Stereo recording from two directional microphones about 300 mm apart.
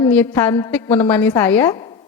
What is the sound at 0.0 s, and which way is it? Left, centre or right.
A woman's voice, centre.